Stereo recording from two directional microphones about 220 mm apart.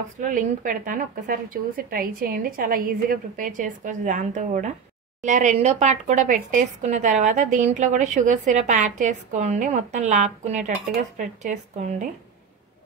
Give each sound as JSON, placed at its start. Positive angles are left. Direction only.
{"t": 0.2, "sound": "speech", "side_deg": -35}